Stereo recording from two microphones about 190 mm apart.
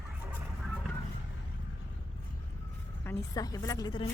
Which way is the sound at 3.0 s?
15° left (ahead or behind).